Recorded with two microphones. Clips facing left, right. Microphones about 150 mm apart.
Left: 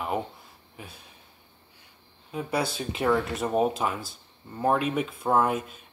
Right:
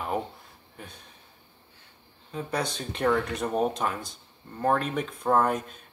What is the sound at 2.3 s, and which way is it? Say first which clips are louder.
Speech: left 2 dB; 10° left (ahead or behind).